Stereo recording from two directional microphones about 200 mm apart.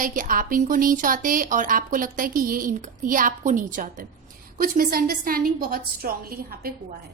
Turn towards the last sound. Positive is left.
turn(degrees=-50)  # may be behind; listen again after turning